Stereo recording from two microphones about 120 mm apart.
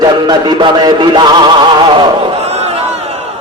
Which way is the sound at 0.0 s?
35° right (ahead or behind).